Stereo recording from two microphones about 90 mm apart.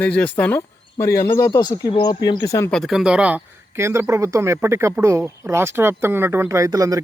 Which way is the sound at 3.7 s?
30° right (ahead or behind).